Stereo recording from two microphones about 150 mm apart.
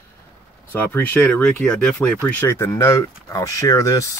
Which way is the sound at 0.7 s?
15° left (ahead or behind).